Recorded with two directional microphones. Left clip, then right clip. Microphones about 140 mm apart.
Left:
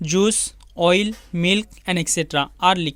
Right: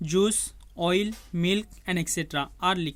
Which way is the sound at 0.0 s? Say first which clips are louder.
Left 5 dB; 25° left (ahead or behind).